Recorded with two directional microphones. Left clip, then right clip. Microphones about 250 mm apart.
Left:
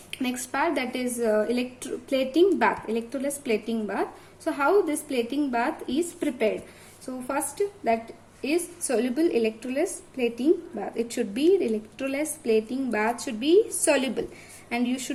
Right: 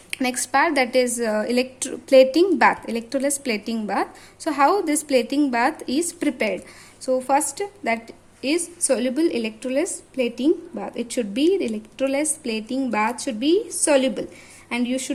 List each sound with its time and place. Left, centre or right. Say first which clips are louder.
0.1 s a woman's voice: right 8 dB; right